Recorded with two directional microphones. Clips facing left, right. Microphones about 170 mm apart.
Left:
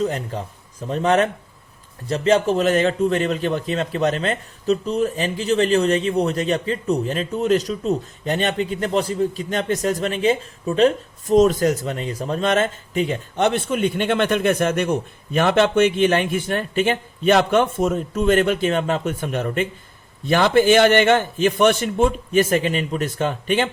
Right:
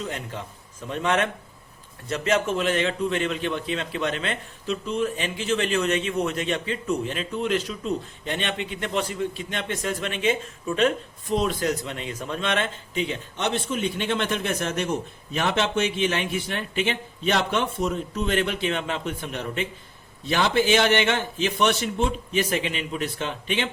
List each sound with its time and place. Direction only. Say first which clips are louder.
0.0 s a man's voice: left 9 dB; 40° left (ahead or behind)